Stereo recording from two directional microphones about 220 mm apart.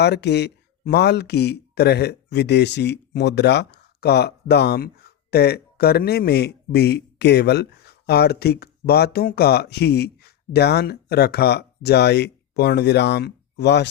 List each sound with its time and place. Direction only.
0.0 s speech: 50° left (ahead or behind)